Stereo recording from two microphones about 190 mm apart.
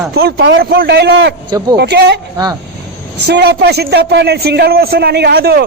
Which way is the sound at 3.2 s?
60° right (ahead or behind).